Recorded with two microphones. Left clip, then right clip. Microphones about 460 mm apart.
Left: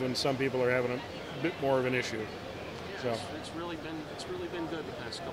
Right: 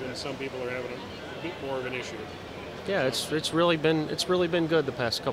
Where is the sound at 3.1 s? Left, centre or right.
Right.